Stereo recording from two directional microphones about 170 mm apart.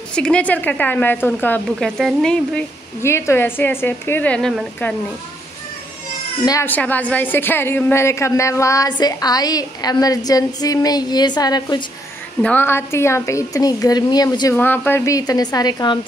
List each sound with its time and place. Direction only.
0.1 s a woman's voice: 5° left (ahead or behind)
3.0 s a woman's voice: 15° left (ahead or behind)
6.4 s a woman's voice: 15° left (ahead or behind)
12.4 s a woman's voice: 10° left (ahead or behind)
14.6 s a woman's voice: 10° left (ahead or behind)